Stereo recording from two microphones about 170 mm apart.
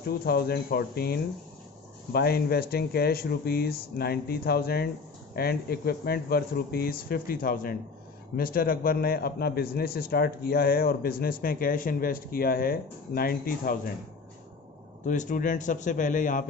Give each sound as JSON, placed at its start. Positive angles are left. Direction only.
{"t": 0.1, "sound": "speech", "side_deg": 65}
{"t": 15.0, "sound": "speech", "side_deg": 50}